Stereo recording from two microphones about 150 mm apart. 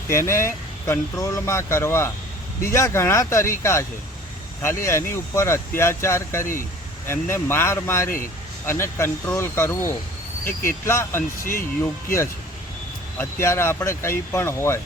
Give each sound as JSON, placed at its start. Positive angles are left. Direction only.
{"t": 0.1, "sound": "speech", "side_deg": 20}